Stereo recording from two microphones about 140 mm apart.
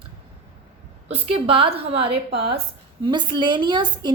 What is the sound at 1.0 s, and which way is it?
A woman's voice, 45° right (ahead or behind).